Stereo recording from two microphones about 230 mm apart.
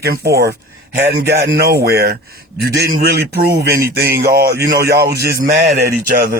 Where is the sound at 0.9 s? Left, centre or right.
Right.